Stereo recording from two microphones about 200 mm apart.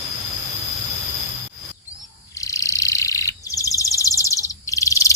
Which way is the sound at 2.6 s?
15° left (ahead or behind).